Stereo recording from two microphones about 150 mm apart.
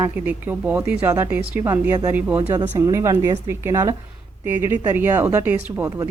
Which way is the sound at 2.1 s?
10° right (ahead or behind).